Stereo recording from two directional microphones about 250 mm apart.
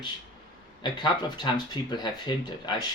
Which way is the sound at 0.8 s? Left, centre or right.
Centre.